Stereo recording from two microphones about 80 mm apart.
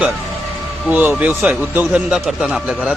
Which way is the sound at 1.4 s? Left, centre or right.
Centre.